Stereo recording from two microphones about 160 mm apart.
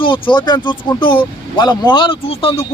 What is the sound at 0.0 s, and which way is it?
Speech, 30° left (ahead or behind).